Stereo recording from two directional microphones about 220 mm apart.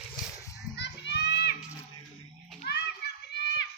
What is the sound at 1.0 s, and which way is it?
Children playing, 50° left (ahead or behind).